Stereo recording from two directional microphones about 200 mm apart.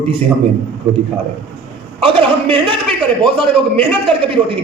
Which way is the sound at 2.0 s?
25° right (ahead or behind).